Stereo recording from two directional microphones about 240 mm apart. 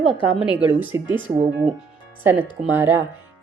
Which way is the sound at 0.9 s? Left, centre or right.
Centre.